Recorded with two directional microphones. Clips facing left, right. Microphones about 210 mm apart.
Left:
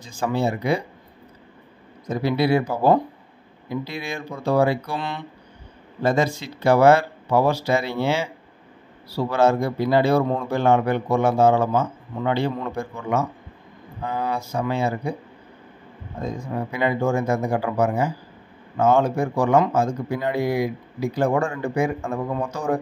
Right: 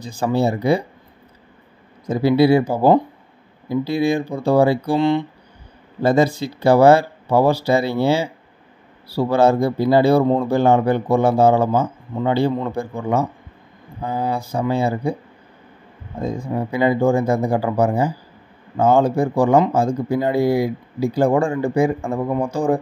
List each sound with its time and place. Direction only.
0.0 s a man's voice: 35° right (ahead or behind)
2.0 s a man's voice: 30° right (ahead or behind)
16.2 s a man's voice: 30° right (ahead or behind)